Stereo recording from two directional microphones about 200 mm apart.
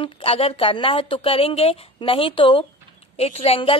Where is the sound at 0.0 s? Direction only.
25° left (ahead or behind).